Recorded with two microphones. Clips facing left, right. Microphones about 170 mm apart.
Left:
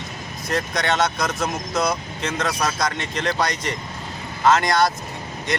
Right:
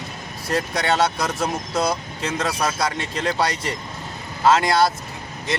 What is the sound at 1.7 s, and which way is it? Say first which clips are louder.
Speech: even; 30° right (ahead or behind).